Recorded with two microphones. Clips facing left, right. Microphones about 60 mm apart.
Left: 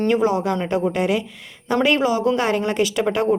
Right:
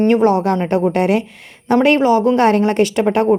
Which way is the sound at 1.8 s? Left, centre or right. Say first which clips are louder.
Right 5 dB; right.